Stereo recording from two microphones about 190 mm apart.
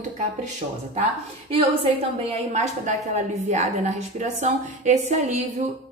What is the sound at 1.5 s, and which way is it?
A woman's voice, 30° right (ahead or behind).